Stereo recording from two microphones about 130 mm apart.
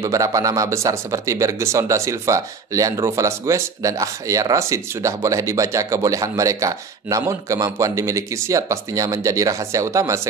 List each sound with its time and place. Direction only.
0.0 s speech: 25° right (ahead or behind)